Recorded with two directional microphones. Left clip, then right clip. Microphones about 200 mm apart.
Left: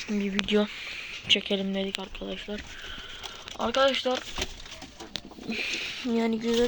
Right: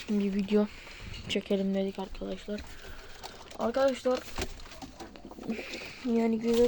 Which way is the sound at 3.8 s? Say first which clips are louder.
Left 3 dB; 5° right (ahead or behind).